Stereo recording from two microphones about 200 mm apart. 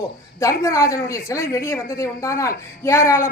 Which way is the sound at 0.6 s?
15° left (ahead or behind).